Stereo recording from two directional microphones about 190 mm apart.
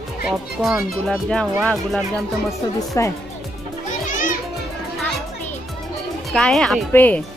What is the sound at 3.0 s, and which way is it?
Speech, 15° left (ahead or behind).